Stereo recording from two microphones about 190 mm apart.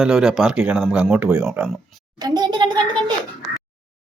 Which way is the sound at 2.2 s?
20° right (ahead or behind).